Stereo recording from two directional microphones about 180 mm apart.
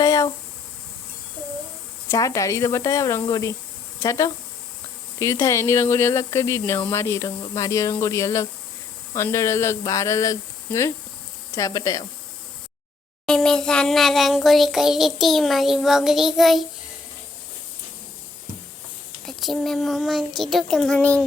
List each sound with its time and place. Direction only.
0.0 s a sound: 20° left (ahead or behind)
2.0 s speech: 20° left (ahead or behind)
13.2 s child singing: 5° left (ahead or behind)
19.2 s child singing: centre (ahead or behind)